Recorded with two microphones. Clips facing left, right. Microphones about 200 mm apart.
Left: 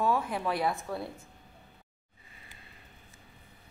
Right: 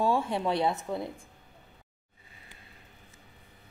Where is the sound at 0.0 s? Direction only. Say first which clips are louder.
Right 2 dB; 30° right (ahead or behind).